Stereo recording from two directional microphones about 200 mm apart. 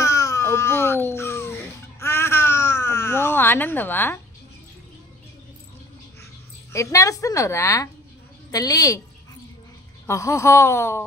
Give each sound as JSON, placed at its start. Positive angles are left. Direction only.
{"t": 0.0, "sound": "baby cry", "side_deg": 15}
{"t": 6.7, "sound": "a woman's voice", "side_deg": 15}
{"t": 10.0, "sound": "a woman's voice", "side_deg": 15}